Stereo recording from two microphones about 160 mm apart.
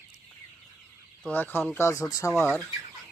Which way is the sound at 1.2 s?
10° left (ahead or behind).